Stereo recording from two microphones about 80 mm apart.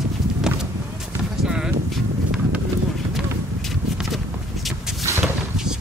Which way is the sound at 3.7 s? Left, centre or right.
Centre.